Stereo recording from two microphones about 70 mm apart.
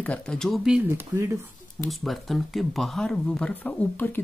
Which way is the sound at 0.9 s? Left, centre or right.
Right.